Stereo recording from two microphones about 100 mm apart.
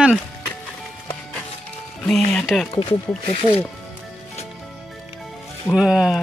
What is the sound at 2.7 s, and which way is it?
Speech, 70° left (ahead or behind).